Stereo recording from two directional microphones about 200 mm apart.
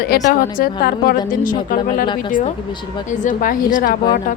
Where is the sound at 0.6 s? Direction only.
50° left (ahead or behind).